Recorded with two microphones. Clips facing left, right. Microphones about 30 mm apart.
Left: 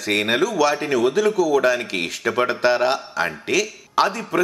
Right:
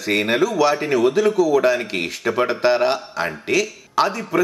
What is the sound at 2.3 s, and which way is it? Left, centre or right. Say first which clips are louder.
Speech: right 1 dB; centre.